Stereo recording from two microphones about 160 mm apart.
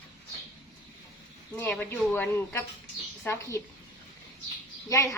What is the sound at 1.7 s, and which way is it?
A woman's voice, 5° left (ahead or behind).